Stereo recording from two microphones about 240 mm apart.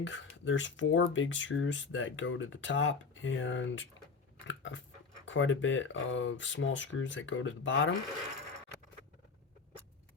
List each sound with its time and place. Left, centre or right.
0.0 s speech: left
4.4 s biting: left
5.2 s speech: left